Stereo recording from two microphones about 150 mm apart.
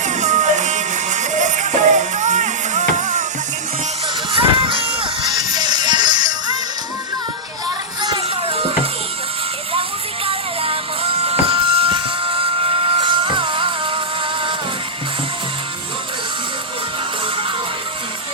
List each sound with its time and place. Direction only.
0.0 s music: 55° right (ahead or behind)
4.3 s music: 35° right (ahead or behind)
8.0 s music: 35° right (ahead or behind)
10.2 s music: 40° right (ahead or behind)